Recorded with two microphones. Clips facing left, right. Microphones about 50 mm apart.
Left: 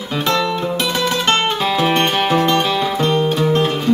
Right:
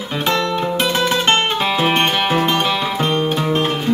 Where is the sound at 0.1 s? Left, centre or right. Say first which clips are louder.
Left 1 dB; centre.